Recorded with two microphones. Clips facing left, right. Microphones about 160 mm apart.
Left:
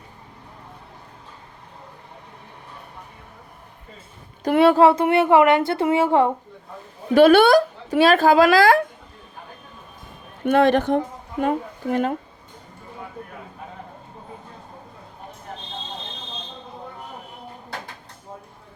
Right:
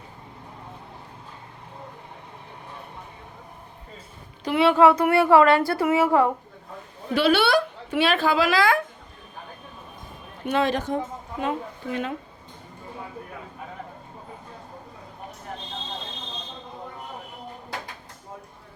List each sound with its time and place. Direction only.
4.4 s a woman's voice: 45° left (ahead or behind); by 6.3 s 25° left (ahead or behind)
7.1 s speech: 50° left (ahead or behind)
10.4 s a woman's voice: 55° left (ahead or behind)